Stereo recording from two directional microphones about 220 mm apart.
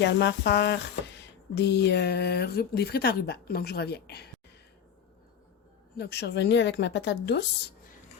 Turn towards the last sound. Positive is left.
turn(degrees=50)  # may be behind; listen again after turning